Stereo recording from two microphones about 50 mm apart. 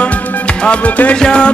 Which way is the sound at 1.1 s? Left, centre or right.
Centre.